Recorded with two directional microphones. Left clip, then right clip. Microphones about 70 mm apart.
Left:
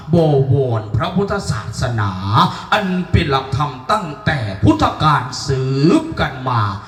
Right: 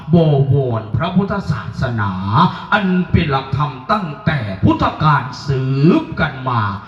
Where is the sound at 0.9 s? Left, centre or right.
Left.